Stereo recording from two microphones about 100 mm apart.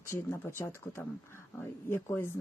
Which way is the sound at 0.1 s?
25° left (ahead or behind).